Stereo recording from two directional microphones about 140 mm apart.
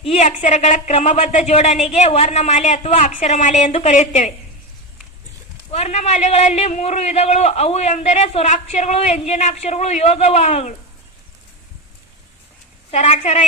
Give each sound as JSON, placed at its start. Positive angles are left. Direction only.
{"t": 0.0, "sound": "a man's voice", "side_deg": 50}
{"t": 5.7, "sound": "a man's voice", "side_deg": 50}
{"t": 12.9, "sound": "a woman's voice", "side_deg": 55}